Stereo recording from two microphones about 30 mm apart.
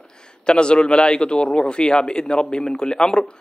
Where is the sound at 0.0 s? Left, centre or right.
Left.